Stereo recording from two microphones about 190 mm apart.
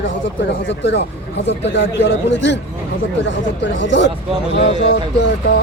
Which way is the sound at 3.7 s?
70° left (ahead or behind).